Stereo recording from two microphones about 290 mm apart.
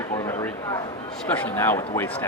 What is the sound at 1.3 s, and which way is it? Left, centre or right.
Speech, centre.